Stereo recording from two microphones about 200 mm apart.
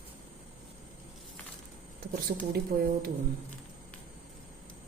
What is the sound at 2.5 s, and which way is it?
Speech, 55° right (ahead or behind).